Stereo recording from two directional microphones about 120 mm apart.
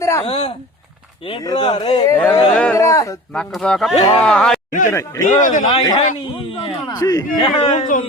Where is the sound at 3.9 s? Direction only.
60° left (ahead or behind).